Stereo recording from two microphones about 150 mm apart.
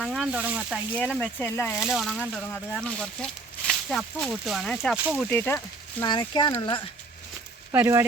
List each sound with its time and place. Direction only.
0.0 s speech: centre (ahead or behind)
0.9 s speech: 10° left (ahead or behind)
1.8 s speech: 5° right (ahead or behind)
5.3 s speech: 15° left (ahead or behind)
6.1 s speech: 30° left (ahead or behind)
7.7 s speech: 20° right (ahead or behind)